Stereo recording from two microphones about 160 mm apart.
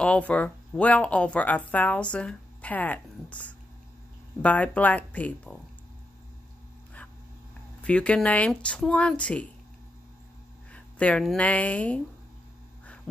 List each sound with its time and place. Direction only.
0.0 s speech: 5° left (ahead or behind)
7.8 s speech: 10° left (ahead or behind)
10.7 s speech: 10° left (ahead or behind)